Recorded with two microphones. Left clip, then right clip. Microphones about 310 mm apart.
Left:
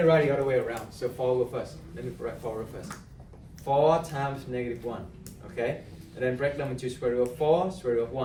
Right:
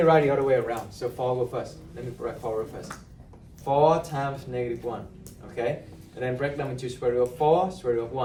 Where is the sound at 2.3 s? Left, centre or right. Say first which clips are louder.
Right 3 dB; centre.